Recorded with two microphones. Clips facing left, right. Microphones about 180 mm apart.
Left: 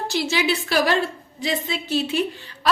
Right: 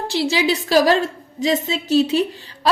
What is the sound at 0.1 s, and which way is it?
A woman's voice, 30° right (ahead or behind).